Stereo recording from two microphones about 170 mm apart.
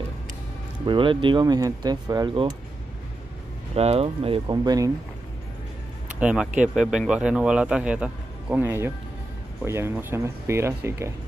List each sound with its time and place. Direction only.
0.8 s speech: 30° right (ahead or behind)
3.7 s speech: 35° right (ahead or behind); by 4.9 s 20° right (ahead or behind)
6.1 s a man's voice: 5° right (ahead or behind)